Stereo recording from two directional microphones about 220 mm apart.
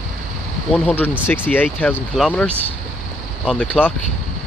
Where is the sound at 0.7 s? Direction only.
5° left (ahead or behind).